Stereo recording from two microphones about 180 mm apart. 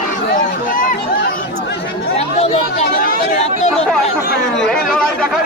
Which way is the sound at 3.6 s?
35° left (ahead or behind).